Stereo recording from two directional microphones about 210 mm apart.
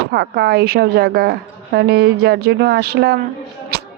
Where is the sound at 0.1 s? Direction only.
50° right (ahead or behind).